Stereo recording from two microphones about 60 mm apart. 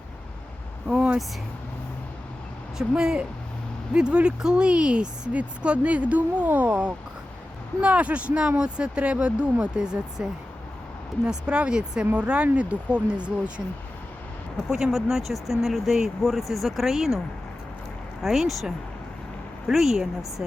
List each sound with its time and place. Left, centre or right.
0.9 s vehicle: centre
3.0 s speech: centre
11.3 s speech: centre
14.7 s speech: centre
18.2 s speech: centre